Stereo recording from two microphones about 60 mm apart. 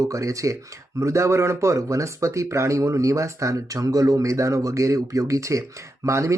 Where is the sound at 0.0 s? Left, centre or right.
Right.